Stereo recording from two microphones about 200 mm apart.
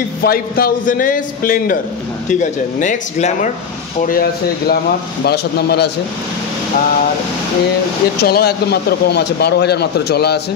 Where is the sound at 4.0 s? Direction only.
45° left (ahead or behind).